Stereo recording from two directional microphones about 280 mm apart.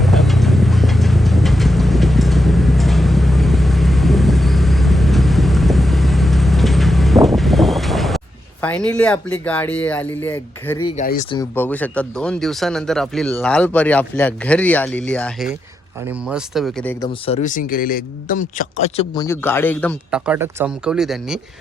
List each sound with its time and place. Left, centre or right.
0.0 s vehicle: centre
8.6 s speech: centre
10.8 s speech: left
11.3 s speech: centre
17.1 s a man's voice: left; by 21.3 s centre